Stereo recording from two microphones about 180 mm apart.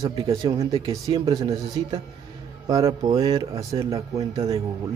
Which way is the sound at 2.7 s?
20° right (ahead or behind).